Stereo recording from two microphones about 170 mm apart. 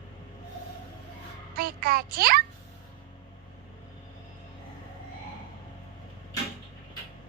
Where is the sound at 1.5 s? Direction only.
60° right (ahead or behind).